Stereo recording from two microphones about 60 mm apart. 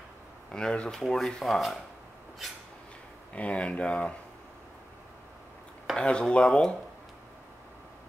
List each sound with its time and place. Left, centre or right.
0.5 s speech: centre
1.0 s rub: centre
3.3 s speech: left
5.9 s speech: centre